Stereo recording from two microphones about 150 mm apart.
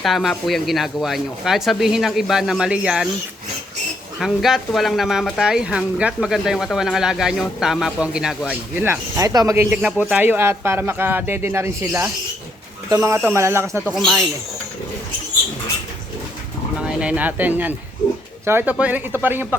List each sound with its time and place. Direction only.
0.0 s speech: centre (ahead or behind)
4.2 s speech: centre (ahead or behind)
8.8 s speech: 15° right (ahead or behind)
13.9 s speech: centre (ahead or behind)
16.8 s speech: 5° right (ahead or behind)